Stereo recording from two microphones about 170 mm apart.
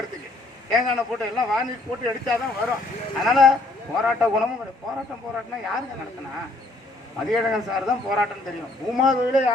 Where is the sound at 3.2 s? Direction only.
Centre (ahead or behind).